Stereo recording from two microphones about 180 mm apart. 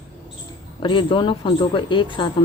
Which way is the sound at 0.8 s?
25° left (ahead or behind).